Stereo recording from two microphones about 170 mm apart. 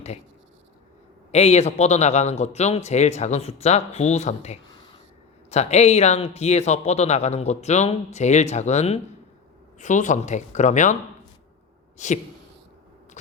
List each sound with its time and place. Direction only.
1.3 s speech: 40° left (ahead or behind)
4.7 s a sound: 30° left (ahead or behind)
5.5 s speech: 40° left (ahead or behind)
11.9 s speech: 45° left (ahead or behind)